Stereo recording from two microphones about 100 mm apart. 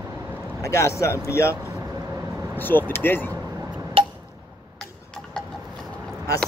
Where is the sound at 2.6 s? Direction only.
20° left (ahead or behind).